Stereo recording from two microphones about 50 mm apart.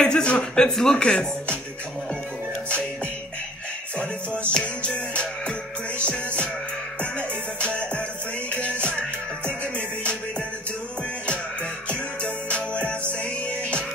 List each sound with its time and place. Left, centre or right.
0.0 s speech: centre
4.0 s music: left
11.9 s music: left